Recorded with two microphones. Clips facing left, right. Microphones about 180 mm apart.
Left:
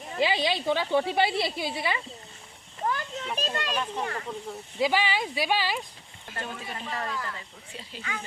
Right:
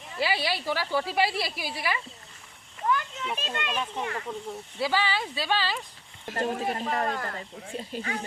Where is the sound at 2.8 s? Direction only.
35° left (ahead or behind).